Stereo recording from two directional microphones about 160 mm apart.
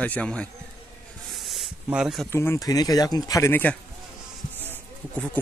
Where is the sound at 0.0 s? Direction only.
5° left (ahead or behind).